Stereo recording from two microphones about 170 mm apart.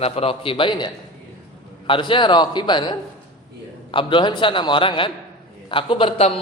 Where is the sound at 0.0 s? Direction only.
35° left (ahead or behind).